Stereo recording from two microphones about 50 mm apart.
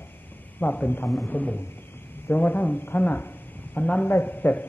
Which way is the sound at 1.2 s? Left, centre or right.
Left.